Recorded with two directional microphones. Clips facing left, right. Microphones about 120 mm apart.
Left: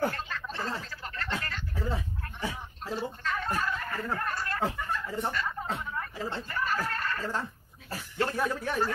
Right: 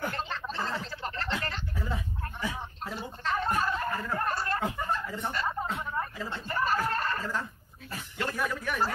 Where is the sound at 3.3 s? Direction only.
30° right (ahead or behind).